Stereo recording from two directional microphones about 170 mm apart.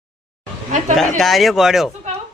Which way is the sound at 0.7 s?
45° right (ahead or behind).